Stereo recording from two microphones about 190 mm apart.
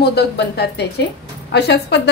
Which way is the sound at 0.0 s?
60° left (ahead or behind).